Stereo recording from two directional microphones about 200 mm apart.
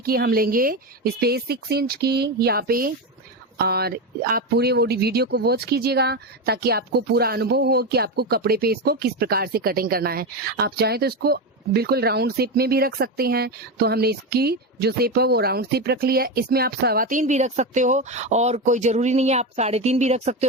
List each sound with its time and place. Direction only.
0.0 s speech: 50° right (ahead or behind)